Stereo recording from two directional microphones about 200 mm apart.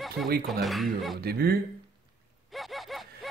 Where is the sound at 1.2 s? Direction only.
50° right (ahead or behind).